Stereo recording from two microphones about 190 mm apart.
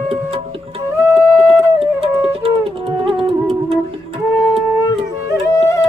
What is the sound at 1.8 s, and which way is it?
Flute, 30° right (ahead or behind).